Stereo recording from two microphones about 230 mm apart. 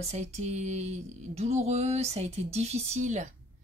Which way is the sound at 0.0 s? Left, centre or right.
Right.